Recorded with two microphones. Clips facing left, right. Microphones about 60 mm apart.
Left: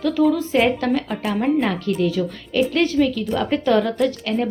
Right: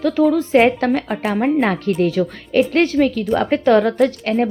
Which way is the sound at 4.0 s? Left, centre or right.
Right.